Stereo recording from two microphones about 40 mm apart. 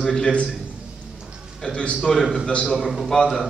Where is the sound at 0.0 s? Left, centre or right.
Centre.